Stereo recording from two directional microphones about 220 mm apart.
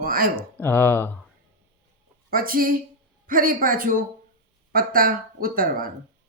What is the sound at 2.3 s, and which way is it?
Speech, 40° right (ahead or behind).